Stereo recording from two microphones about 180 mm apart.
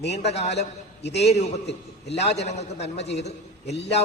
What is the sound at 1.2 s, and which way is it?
A man's voice, 35° left (ahead or behind).